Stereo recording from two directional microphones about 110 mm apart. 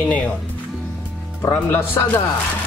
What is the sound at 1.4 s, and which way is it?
Speech, 20° left (ahead or behind).